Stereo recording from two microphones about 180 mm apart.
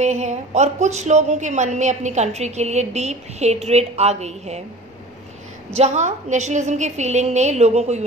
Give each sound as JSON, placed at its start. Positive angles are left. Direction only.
{"t": 0.0, "sound": "a woman's voice", "side_deg": -40}
{"t": 5.8, "sound": "a woman's voice", "side_deg": -40}